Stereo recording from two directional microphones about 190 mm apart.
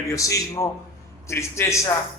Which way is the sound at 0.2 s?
15° left (ahead or behind).